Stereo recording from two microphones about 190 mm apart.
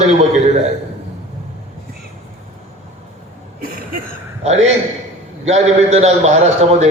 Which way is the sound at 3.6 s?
50° right (ahead or behind).